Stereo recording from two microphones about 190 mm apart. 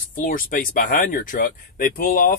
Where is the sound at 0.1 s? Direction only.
45° left (ahead or behind).